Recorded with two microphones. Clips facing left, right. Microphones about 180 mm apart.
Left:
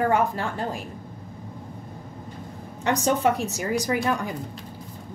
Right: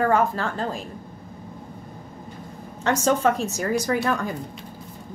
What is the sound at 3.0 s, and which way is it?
A woman's voice, 15° left (ahead or behind).